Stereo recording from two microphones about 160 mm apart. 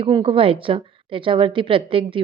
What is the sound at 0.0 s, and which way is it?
A woman's voice, 35° right (ahead or behind).